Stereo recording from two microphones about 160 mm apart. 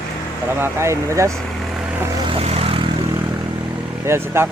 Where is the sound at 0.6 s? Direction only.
15° right (ahead or behind).